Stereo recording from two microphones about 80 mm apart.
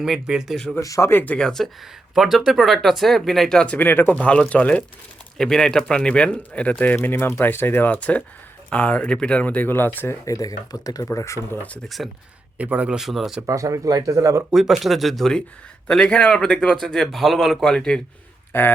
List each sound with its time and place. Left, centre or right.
0.0 s speech: centre
0.5 s speech: centre
0.8 s speech: left
1.1 s speech: centre
2.1 s speech: centre
3.6 s speech: centre
10.2 s speech: left
11.5 s speech: centre
12.0 s speech: centre
12.5 s speech: centre
13.0 s speech: centre
13.5 s speech: right
14.5 s speech: centre